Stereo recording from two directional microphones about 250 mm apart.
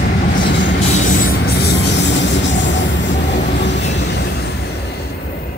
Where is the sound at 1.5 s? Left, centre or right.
Left.